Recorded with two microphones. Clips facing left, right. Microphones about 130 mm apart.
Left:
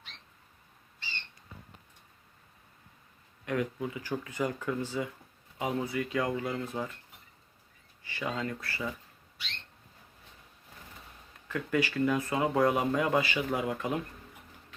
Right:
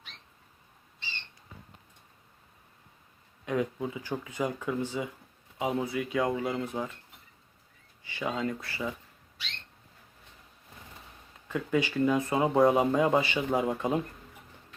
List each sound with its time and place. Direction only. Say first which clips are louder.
3.4 s speech: right 2 dB; 20° right (ahead or behind)
8.0 s speech: right 3 dB; 15° right (ahead or behind)
11.4 s speech: right 2 dB; 20° right (ahead or behind)